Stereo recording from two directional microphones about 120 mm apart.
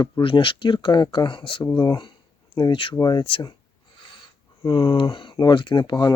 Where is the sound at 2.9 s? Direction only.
30° left (ahead or behind).